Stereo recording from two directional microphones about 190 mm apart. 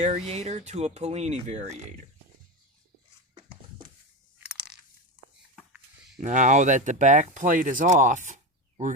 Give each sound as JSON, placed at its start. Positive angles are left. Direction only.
{"t": 0.3, "sound": "speech", "side_deg": -35}
{"t": 6.1, "sound": "speech", "side_deg": -40}